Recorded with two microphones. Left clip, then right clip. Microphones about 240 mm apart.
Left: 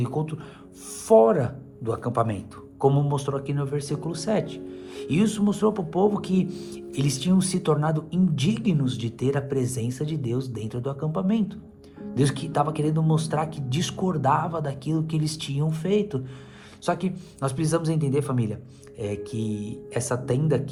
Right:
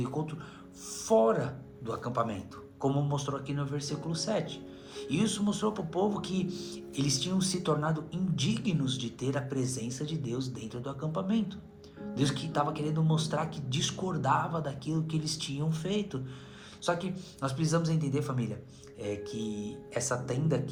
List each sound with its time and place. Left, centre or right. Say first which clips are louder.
1.0 s a man's voice: left 8 dB; left